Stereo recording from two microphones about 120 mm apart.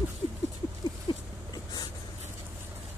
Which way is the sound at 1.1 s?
45° left (ahead or behind).